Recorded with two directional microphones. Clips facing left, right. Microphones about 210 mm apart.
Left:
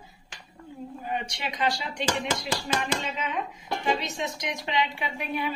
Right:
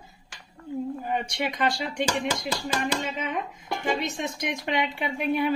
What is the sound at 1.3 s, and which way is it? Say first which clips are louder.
A woman's voice: right 2 dB; 55° right (ahead or behind).